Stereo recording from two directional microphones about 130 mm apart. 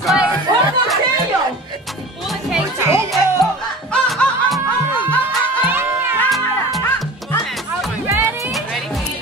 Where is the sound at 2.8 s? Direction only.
20° right (ahead or behind).